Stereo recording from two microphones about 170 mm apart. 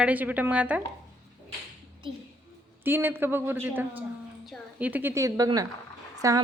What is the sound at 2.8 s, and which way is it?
A man's voice, 10° right (ahead or behind).